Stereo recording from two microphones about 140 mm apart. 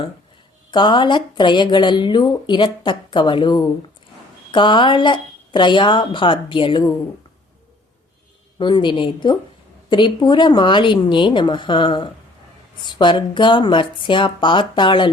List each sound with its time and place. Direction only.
0.7 s speech: 35° left (ahead or behind)
8.5 s speech: 35° left (ahead or behind)